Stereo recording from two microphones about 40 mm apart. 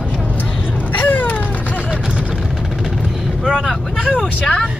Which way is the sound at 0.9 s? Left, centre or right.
Left.